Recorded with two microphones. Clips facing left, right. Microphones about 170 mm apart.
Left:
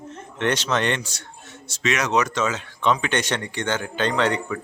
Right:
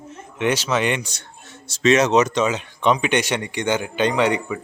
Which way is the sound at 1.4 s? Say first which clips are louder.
Right 8 dB; 30° right (ahead or behind).